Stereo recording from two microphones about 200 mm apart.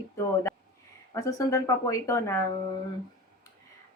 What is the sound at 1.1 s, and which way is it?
Speech, 15° left (ahead or behind).